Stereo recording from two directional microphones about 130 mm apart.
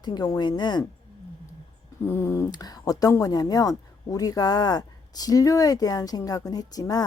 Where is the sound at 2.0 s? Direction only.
20° left (ahead or behind).